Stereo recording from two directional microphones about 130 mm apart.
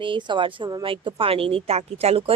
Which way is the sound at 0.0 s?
40° right (ahead or behind).